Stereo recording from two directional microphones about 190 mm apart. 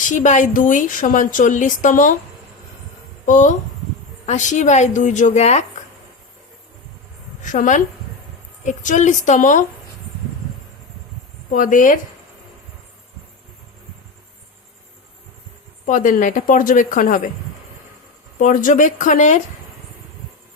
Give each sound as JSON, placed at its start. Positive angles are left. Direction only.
{"t": 0.1, "sound": "a woman's voice", "side_deg": 40}
{"t": 3.2, "sound": "a woman's voice", "side_deg": 40}
{"t": 7.4, "sound": "a woman's voice", "side_deg": 40}
{"t": 11.5, "sound": "a woman's voice", "side_deg": 45}
{"t": 15.9, "sound": "a woman's voice", "side_deg": 45}
{"t": 18.3, "sound": "a woman's voice", "side_deg": 45}